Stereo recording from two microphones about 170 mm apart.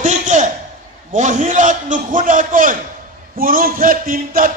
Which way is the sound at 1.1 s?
45° right (ahead or behind).